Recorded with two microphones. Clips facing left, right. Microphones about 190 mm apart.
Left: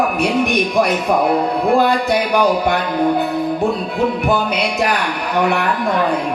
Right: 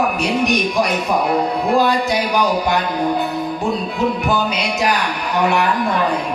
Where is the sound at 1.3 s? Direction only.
55° left (ahead or behind).